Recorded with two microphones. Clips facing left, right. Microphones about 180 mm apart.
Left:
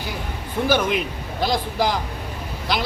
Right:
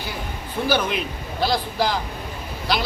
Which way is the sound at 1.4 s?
20° left (ahead or behind).